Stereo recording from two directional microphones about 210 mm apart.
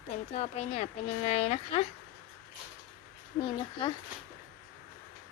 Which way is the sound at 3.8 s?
25° left (ahead or behind).